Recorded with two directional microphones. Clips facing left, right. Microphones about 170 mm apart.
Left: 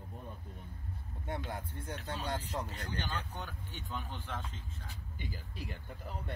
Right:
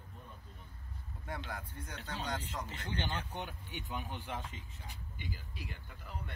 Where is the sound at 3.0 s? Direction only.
20° right (ahead or behind).